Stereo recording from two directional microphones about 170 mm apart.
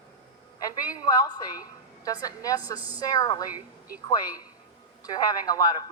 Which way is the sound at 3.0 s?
20° left (ahead or behind).